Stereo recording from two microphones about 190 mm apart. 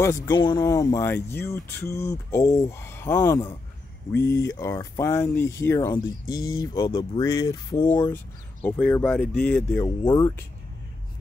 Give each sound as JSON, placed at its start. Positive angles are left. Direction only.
{"t": 0.0, "sound": "speech", "side_deg": 15}